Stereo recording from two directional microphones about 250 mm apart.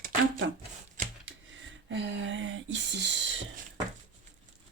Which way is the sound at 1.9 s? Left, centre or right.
Right.